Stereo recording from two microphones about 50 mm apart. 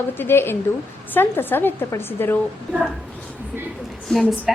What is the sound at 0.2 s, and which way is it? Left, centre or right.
A woman's voice, left.